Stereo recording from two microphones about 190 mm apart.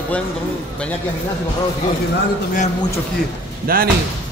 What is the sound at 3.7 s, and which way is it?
Speech, 50° right (ahead or behind).